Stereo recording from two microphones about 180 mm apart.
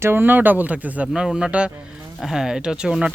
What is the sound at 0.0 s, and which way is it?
Speech, 10° right (ahead or behind).